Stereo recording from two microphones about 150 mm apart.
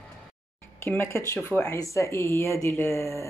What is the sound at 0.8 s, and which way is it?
Speech, 15° left (ahead or behind).